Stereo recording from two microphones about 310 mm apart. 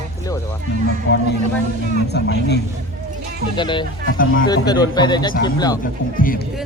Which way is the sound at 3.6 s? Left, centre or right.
Centre.